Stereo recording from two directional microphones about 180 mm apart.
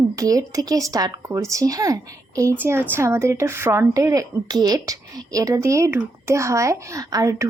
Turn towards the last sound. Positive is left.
turn(degrees=-20)  # may be behind; listen again after turning